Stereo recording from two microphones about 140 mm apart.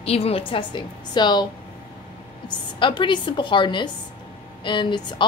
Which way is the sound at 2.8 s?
35° left (ahead or behind).